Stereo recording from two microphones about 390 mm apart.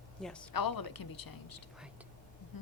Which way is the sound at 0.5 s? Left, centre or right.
Left.